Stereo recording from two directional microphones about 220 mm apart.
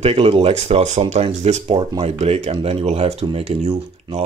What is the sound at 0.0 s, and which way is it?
Speech, 25° right (ahead or behind).